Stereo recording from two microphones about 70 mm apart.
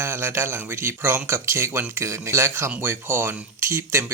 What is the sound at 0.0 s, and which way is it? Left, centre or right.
Speech, right.